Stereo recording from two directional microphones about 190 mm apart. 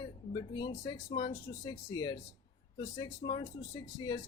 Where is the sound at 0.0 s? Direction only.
25° left (ahead or behind).